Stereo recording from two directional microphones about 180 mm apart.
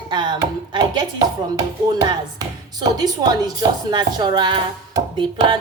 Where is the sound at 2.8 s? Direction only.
20° right (ahead or behind).